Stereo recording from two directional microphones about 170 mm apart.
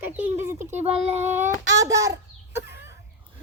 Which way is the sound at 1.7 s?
20° right (ahead or behind).